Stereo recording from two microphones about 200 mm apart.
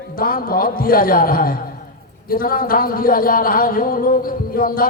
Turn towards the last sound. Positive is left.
turn(degrees=45)  # may be behind; listen again after turning